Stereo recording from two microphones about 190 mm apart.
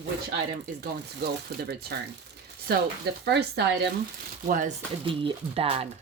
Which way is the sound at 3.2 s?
60° right (ahead or behind).